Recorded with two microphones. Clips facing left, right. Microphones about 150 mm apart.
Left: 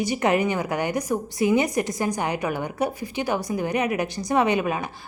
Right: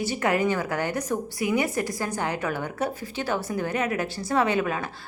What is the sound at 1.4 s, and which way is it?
A woman's voice, 25° left (ahead or behind).